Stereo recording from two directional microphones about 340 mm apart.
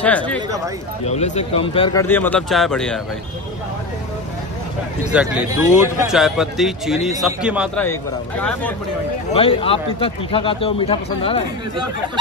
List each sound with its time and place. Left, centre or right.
0.0 s a man's voice: centre
1.0 s a man's voice: centre
5.1 s a man's voice: centre
9.3 s a man's voice: centre